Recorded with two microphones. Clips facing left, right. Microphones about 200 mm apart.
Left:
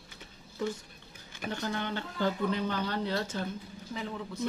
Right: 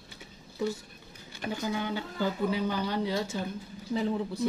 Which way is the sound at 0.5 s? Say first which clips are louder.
Right 2 dB; 10° right (ahead or behind).